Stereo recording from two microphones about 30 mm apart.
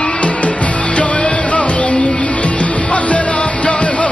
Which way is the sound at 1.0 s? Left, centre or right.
Left.